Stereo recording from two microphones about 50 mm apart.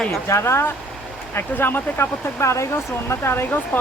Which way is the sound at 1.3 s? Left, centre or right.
Left.